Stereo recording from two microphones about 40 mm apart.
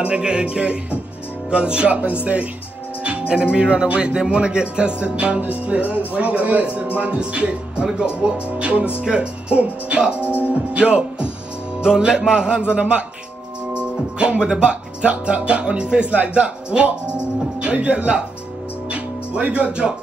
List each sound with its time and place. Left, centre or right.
0.2 s speech: right
18.9 s music: right